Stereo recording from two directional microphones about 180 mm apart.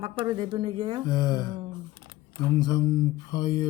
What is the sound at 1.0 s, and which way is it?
Speech, 20° left (ahead or behind).